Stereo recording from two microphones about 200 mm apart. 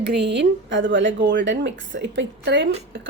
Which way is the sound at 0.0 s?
60° right (ahead or behind).